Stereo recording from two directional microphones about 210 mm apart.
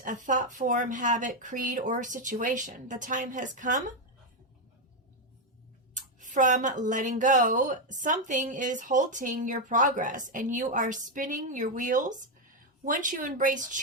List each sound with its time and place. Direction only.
0.0 s speech: 35° right (ahead or behind)
5.9 s speech: 40° right (ahead or behind)